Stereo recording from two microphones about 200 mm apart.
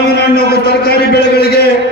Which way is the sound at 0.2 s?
55° left (ahead or behind).